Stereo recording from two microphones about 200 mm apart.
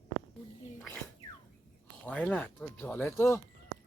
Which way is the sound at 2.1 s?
5° left (ahead or behind).